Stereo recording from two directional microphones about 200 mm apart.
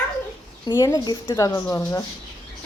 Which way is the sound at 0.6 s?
20° left (ahead or behind).